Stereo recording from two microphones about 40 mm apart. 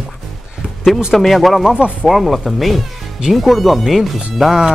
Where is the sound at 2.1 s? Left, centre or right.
Centre.